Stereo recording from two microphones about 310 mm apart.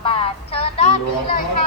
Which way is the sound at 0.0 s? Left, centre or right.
Centre.